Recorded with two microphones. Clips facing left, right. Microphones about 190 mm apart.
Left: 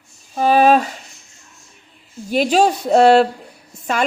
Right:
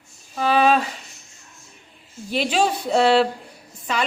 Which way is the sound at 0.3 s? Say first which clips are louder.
Left 5 dB; 45° left (ahead or behind).